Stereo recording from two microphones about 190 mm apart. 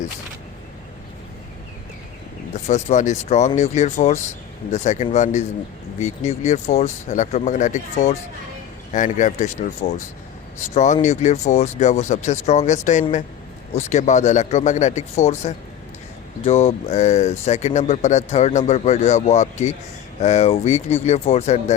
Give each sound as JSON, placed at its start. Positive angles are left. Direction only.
{"t": 2.5, "sound": "speech", "side_deg": 35}
{"t": 11.0, "sound": "speech", "side_deg": 35}